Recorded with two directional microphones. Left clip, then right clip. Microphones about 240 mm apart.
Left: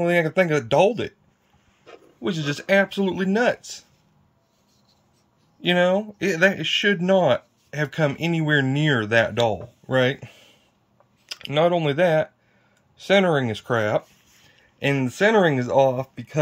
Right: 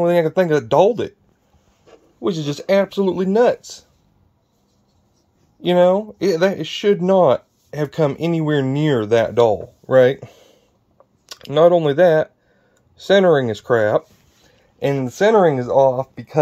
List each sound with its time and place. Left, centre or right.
0.0 s speech: centre
5.6 s speech: centre
15.4 s speech: left